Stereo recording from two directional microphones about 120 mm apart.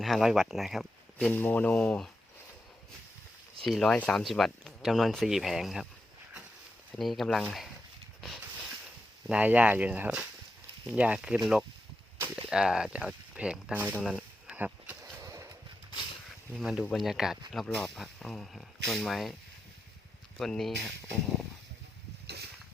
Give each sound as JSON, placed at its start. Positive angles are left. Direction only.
{"t": 0.0, "sound": "speech", "side_deg": 0}
{"t": 1.2, "sound": "speech", "side_deg": 15}
{"t": 3.6, "sound": "speech", "side_deg": 5}
{"t": 6.9, "sound": "speech", "side_deg": 0}
{"t": 9.2, "sound": "speech", "side_deg": -10}
{"t": 13.9, "sound": "a sound", "side_deg": 0}
{"t": 15.2, "sound": "skateboard", "side_deg": -25}
{"t": 16.6, "sound": "speech", "side_deg": 0}
{"t": 20.4, "sound": "speech", "side_deg": 0}